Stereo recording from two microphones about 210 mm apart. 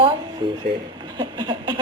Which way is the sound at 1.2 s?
20° right (ahead or behind).